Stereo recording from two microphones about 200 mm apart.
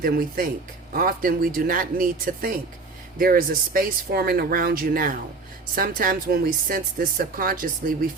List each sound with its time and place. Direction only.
0.0 s speech: 45° right (ahead or behind)